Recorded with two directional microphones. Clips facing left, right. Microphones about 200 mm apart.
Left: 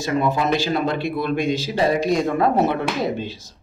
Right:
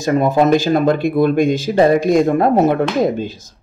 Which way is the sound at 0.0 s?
45° right (ahead or behind).